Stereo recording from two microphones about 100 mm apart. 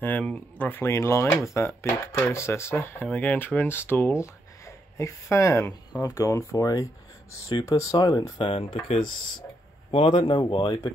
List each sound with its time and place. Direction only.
0.2 s speech: 15° left (ahead or behind); by 8.3 s 35° left (ahead or behind)
8.4 s speech: 55° left (ahead or behind)
9.8 s a man's voice: 65° left (ahead or behind)
10.1 s speech: 45° left (ahead or behind)